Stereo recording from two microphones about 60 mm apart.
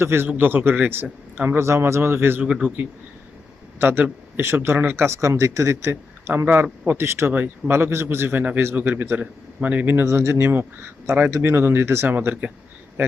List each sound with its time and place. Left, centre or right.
0.0 s speech: right
2.4 s a man's voice: centre
3.8 s speech: right
5.9 s speech: right
8.4 s speech: right
10.0 s speech: right
12.1 s speech: right